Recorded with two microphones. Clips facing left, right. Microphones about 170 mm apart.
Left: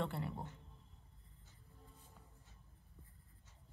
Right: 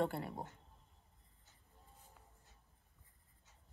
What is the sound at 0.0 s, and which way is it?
Speech, 40° right (ahead or behind).